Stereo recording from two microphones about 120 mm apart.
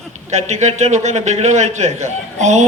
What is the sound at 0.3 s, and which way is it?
A man's voice, 70° right (ahead or behind).